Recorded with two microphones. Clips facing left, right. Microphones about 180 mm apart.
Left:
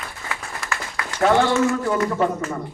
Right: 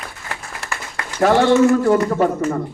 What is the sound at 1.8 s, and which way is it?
Speech, 45° right (ahead or behind).